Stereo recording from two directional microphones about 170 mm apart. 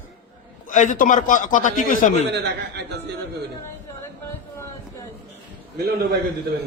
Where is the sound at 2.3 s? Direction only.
80° right.